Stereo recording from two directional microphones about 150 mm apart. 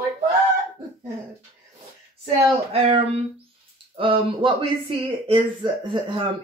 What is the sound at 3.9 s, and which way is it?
Speech, 35° right (ahead or behind).